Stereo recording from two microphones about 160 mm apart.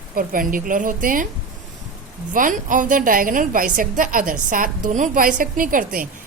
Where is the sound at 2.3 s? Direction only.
55° right (ahead or behind).